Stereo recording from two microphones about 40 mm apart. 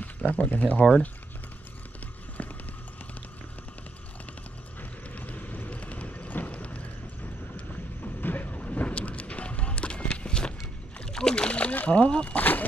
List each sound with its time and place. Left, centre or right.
0.0 s a sound: left
0.5 s speech: left
2.4 s a sound: left
5.1 s vehicle: left
6.5 s boat: left
8.0 s a sound: left
11.1 s splash: centre
11.9 s speech: left
12.3 s speech: left